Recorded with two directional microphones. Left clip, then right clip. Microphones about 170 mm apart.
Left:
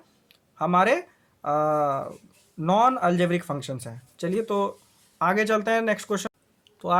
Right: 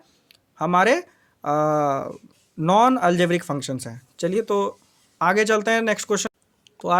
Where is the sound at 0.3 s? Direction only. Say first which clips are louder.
Right 2 dB; 40° right (ahead or behind).